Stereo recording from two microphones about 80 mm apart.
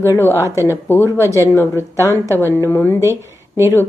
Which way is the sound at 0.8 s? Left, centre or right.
Left.